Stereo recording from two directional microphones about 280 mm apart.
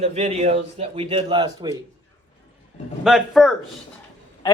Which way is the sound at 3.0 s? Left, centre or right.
Centre.